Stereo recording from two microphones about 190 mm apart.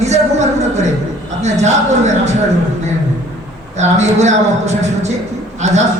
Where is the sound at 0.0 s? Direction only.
35° right (ahead or behind).